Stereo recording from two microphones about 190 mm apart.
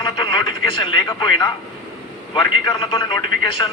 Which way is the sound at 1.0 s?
20° left (ahead or behind).